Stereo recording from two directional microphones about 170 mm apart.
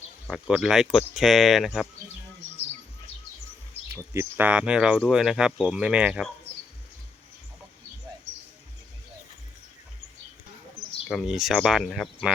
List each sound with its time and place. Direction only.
0.3 s speech: 5° right (ahead or behind)
3.9 s speech: 15° right (ahead or behind)
11.1 s speech: centre (ahead or behind)